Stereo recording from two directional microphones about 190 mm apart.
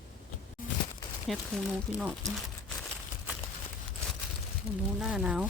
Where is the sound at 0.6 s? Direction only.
45° left (ahead or behind).